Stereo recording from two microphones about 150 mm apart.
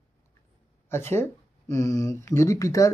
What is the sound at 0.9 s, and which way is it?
Speech, 15° left (ahead or behind).